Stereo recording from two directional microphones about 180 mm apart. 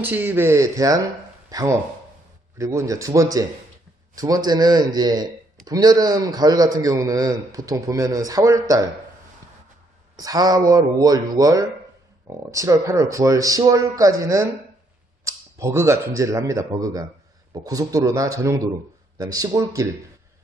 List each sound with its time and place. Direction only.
0.0 s a man's voice: 10° right (ahead or behind)
10.1 s a man's voice: 20° right (ahead or behind)